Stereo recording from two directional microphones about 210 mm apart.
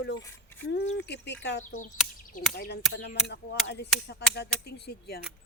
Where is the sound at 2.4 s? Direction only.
40° left (ahead or behind).